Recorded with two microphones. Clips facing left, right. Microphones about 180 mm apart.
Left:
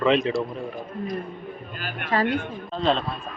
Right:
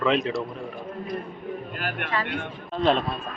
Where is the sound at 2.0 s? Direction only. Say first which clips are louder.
Left 8 dB; 40° left (ahead or behind).